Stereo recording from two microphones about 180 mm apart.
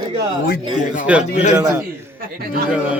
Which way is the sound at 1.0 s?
5° right (ahead or behind).